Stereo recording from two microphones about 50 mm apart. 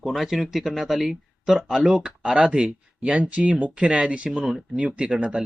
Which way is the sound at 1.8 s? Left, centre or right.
Right.